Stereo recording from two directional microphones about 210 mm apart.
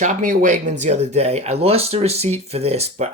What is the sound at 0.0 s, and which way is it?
Speech, 35° right (ahead or behind).